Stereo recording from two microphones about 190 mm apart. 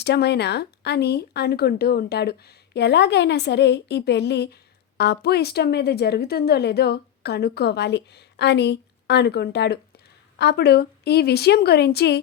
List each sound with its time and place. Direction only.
0.0 s a woman's voice: 60° left (ahead or behind)